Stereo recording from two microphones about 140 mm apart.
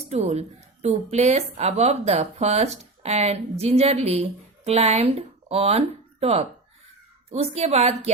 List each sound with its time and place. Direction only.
0.1 s speech: 50° right (ahead or behind)